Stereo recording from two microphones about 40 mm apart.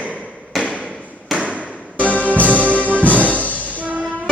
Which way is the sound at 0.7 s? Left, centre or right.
Right.